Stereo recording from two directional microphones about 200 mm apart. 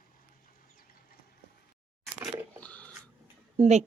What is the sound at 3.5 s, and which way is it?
Speech, 35° right (ahead or behind).